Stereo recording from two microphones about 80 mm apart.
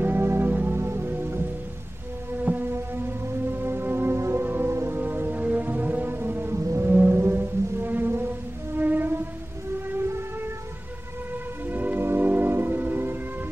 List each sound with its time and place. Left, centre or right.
0.0 s music: right
6.6 s music: right
6.9 s music: right
11.7 s music: right